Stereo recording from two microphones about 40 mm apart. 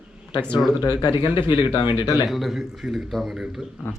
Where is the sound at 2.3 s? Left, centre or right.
Centre.